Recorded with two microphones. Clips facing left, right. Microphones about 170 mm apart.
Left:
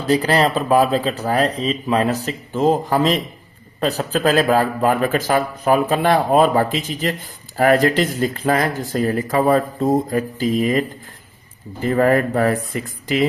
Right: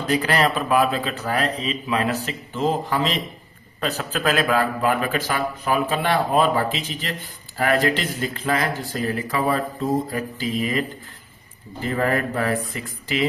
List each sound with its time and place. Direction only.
0.1 s a man's voice: 35° left (ahead or behind)